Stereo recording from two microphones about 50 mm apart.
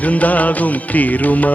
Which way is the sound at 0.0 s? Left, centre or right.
Left.